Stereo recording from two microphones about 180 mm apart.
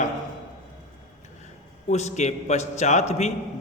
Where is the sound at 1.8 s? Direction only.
40° left (ahead or behind).